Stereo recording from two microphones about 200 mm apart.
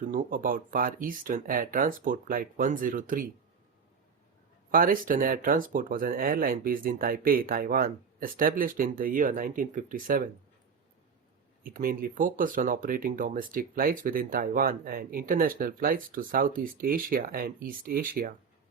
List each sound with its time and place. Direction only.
0.0 s speech: 40° right (ahead or behind)
4.7 s speech: 45° right (ahead or behind)
11.6 s speech: 45° right (ahead or behind)